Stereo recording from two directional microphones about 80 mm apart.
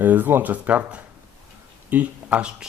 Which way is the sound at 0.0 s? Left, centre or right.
Right.